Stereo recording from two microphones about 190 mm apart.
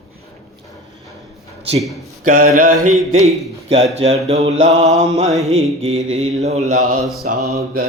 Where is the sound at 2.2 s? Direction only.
45° right (ahead or behind).